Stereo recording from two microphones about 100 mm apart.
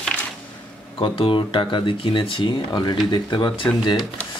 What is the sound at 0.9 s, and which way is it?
Speech, 65° left (ahead or behind).